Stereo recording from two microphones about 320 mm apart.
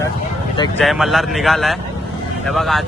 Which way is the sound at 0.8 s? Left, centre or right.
Centre.